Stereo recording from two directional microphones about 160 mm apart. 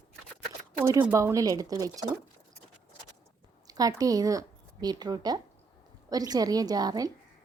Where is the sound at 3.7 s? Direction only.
20° right (ahead or behind).